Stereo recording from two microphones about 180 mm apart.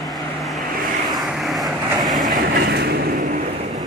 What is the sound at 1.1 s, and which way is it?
Vehicle, centre (ahead or behind).